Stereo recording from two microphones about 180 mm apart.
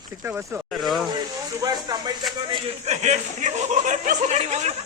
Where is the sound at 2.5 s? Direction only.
35° right (ahead or behind).